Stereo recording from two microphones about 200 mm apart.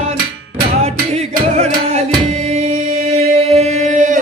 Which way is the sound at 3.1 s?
30° right (ahead or behind).